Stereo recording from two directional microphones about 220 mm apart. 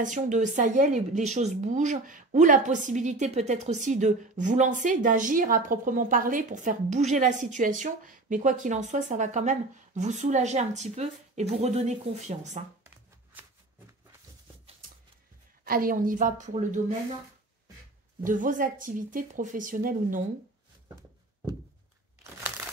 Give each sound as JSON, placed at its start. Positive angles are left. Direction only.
{"t": 0.0, "sound": "a woman's voice", "side_deg": -35}
{"t": 12.8, "sound": "shuffling cards", "side_deg": -10}
{"t": 15.6, "sound": "a woman's voice", "side_deg": -40}
{"t": 18.2, "sound": "a woman's voice", "side_deg": -35}